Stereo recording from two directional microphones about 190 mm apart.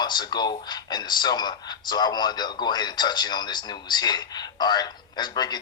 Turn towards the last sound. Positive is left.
turn(degrees=20)  # may be behind; listen again after turning